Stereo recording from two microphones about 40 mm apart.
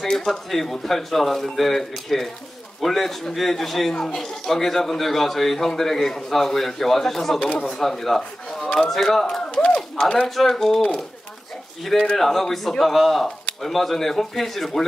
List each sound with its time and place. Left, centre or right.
0.2 s a man's voice: centre
7.3 s speech: left
7.8 s a man's voice: centre
9.5 s a sound: left
10.1 s a man's voice: centre
11.8 s a man's voice: centre